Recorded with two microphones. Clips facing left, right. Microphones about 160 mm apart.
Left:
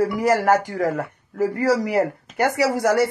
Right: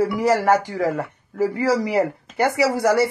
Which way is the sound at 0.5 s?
15° right (ahead or behind).